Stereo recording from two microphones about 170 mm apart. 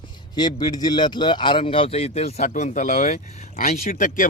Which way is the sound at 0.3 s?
25° left (ahead or behind).